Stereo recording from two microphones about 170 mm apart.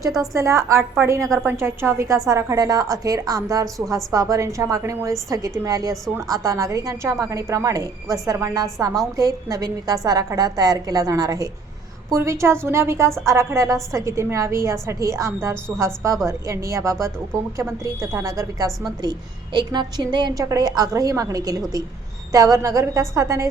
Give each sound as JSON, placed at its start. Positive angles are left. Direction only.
{"t": 0.2, "sound": "a woman's voice", "side_deg": -15}